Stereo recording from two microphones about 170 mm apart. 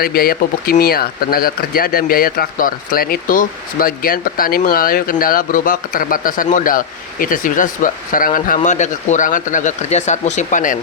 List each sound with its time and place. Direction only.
0.0 s speech: 60° left (ahead or behind)